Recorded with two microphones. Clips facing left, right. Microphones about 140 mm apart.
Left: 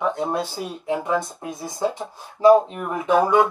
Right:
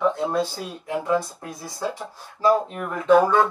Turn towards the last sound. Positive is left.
turn(degrees=15)  # may be behind; listen again after turning